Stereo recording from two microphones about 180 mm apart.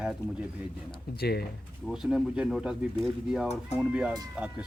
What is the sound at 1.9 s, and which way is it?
Speech, centre (ahead or behind).